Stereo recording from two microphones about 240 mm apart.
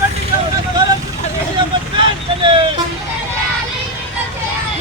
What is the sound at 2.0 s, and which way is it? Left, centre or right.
Vehicle, right.